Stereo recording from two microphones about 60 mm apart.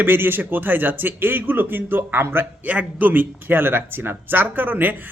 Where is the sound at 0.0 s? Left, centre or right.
Right.